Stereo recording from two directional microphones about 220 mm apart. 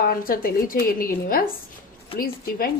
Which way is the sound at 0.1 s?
40° left (ahead or behind).